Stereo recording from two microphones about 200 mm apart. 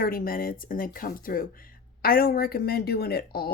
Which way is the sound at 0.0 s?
45° left (ahead or behind).